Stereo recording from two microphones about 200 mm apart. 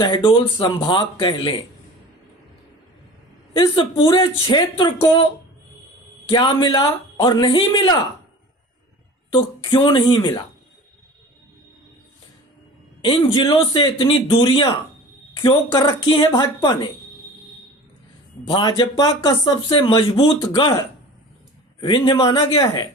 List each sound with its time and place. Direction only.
0.0 s speech: 25° left (ahead or behind)
3.5 s speech: 25° left (ahead or behind)
6.3 s speech: 25° left (ahead or behind)
9.3 s speech: 25° left (ahead or behind)
13.0 s speech: 25° left (ahead or behind)
18.4 s speech: 25° left (ahead or behind)
21.8 s speech: 25° left (ahead or behind)